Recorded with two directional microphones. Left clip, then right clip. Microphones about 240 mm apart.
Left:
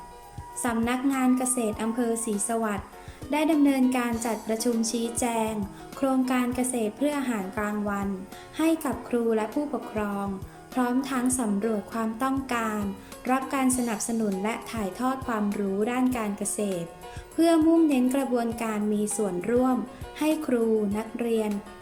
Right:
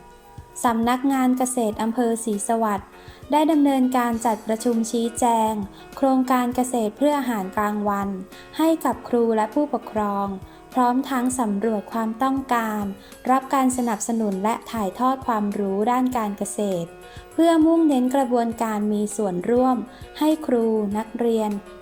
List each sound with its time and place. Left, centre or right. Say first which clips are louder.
0.6 s a woman's voice: right 6 dB; centre
4.9 s a woman's voice: right 5 dB; left
5.2 s a woman's voice: right 10 dB; centre